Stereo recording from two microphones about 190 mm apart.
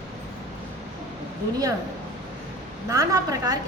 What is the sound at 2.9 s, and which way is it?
Speech, 20° right (ahead or behind).